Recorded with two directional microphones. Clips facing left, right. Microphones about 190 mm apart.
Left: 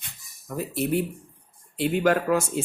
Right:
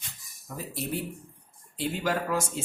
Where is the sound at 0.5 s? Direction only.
65° left (ahead or behind).